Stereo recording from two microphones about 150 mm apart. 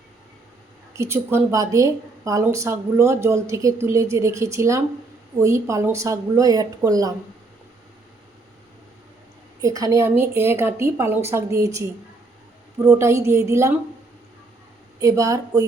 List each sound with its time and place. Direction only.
0.9 s a woman's voice: 15° right (ahead or behind)
9.6 s a woman's voice: 20° right (ahead or behind)
15.0 s a woman's voice: 20° right (ahead or behind)